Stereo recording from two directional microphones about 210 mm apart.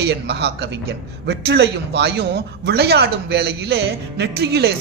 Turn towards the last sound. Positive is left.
turn(degrees=-50)  # may be behind; listen again after turning